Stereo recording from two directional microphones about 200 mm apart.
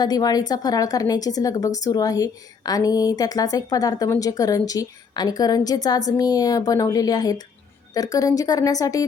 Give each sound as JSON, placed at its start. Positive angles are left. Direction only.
{"t": 0.0, "sound": "a woman's voice", "side_deg": 20}